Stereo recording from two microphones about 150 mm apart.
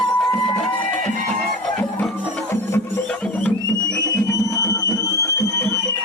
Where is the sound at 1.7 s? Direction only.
10° left (ahead or behind).